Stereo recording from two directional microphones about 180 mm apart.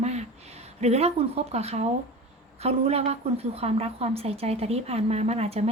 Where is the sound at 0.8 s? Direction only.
35° right (ahead or behind).